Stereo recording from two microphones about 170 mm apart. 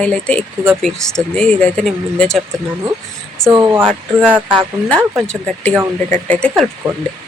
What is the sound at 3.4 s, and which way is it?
Speech, 25° right (ahead or behind).